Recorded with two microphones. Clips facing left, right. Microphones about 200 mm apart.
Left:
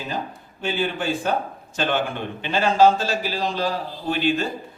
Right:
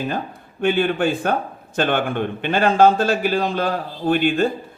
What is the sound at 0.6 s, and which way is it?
A man's voice, 60° right (ahead or behind).